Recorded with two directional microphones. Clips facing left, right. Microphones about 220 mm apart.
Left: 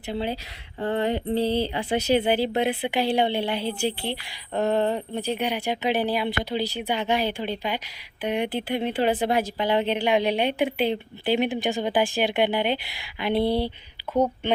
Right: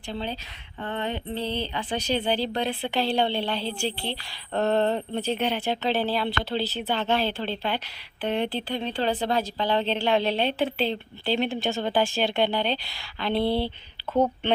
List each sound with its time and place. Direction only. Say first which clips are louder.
0.1 s a woman's voice: left 4 dB; 15° left (ahead or behind)
0.8 s mantra: left 6 dB; 35° left (ahead or behind)
1.5 s a woman's voice: left 5 dB; 10° left (ahead or behind)
2.5 s a woman's voice: left 4 dB; 20° left (ahead or behind)